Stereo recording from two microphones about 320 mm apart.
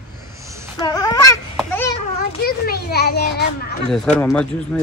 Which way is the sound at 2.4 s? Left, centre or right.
Left.